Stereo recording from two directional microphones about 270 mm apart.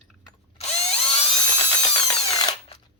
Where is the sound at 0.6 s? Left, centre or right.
Left.